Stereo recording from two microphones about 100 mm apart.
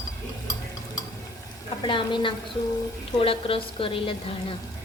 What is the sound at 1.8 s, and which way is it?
A woman's voice, 55° left (ahead or behind).